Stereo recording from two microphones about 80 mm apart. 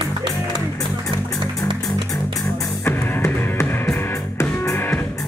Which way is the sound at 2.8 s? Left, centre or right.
Left.